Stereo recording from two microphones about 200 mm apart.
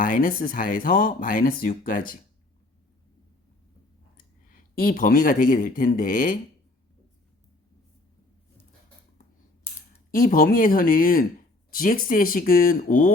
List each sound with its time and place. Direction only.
0.0 s speech: 45° left (ahead or behind)
4.4 s speech: 45° left (ahead or behind)
10.1 s speech: 45° left (ahead or behind)